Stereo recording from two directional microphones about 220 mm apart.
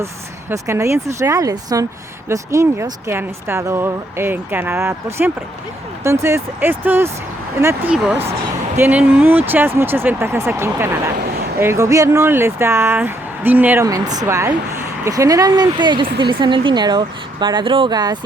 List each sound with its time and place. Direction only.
0.5 s speech: 15° right (ahead or behind)